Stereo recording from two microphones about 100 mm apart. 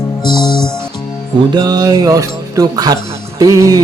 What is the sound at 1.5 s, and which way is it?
Music, 40° right (ahead or behind).